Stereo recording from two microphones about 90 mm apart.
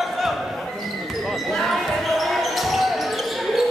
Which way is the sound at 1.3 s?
Centre (ahead or behind).